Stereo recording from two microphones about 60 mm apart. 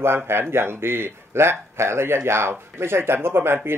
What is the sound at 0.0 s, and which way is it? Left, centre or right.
Speech, right.